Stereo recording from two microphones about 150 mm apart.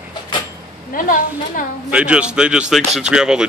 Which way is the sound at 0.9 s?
65° left (ahead or behind).